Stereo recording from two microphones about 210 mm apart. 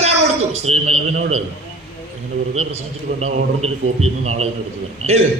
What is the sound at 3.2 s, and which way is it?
A man's voice, 30° right (ahead or behind).